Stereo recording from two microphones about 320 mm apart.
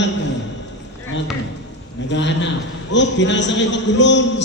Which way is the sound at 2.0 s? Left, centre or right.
Left.